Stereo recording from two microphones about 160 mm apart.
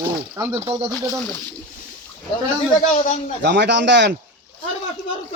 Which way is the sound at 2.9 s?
50° left (ahead or behind).